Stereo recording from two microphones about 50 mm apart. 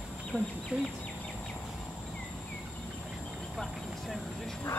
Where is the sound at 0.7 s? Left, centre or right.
Right.